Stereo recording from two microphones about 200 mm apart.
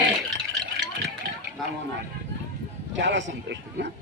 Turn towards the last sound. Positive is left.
turn(degrees=-65)  # may be behind; listen again after turning